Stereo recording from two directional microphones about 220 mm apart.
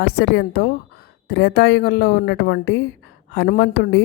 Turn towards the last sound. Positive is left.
turn(degrees=50)  # may be behind; listen again after turning